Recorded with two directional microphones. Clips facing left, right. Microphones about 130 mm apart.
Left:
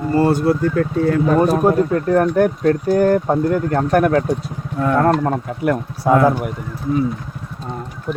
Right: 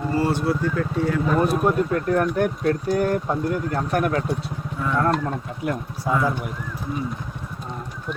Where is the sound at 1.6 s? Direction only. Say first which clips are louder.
Left 5 dB; 35° left (ahead or behind).